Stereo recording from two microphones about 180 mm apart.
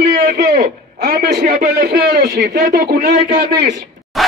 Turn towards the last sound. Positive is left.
turn(degrees=0)  # may be behind; listen again after turning